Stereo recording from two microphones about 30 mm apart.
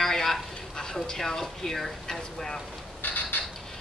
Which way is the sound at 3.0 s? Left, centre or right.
Left.